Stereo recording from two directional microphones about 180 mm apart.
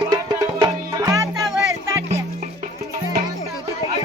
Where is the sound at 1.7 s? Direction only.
15° right (ahead or behind).